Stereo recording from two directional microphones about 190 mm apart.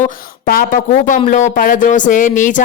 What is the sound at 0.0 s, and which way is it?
Speech, 50° left (ahead or behind).